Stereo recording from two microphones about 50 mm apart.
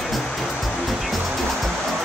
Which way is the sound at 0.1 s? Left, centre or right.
Centre.